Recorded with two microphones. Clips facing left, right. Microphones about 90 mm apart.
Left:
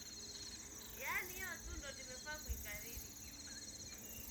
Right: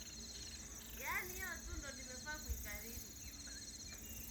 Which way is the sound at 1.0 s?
5° right (ahead or behind).